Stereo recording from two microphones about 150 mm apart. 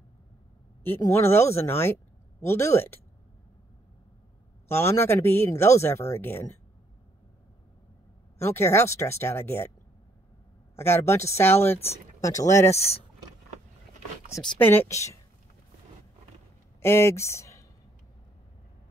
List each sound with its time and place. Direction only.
0.8 s speech: 15° left (ahead or behind)
4.6 s speech: 15° left (ahead or behind)
8.4 s speech: 15° left (ahead or behind)
10.8 s speech: 15° left (ahead or behind)
12.7 s speech: 45° left (ahead or behind)
14.3 s speech: 30° left (ahead or behind)
14.6 s speech: 15° left (ahead or behind)
16.8 s speech: 15° left (ahead or behind)